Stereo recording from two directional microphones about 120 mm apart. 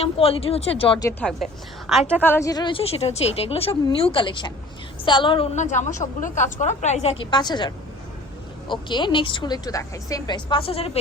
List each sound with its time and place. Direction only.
0.0 s a woman's voice: 55° left (ahead or behind)
1.2 s a woman's voice: centre (ahead or behind)
2.2 s speech: 20° left (ahead or behind)
2.5 s a woman's voice: 40° left (ahead or behind)
5.5 s a woman's voice: 80° left; by 7.2 s 65° left (ahead or behind)
7.2 s a woman's voice: 35° left (ahead or behind); by 10.9 s 55° left (ahead or behind)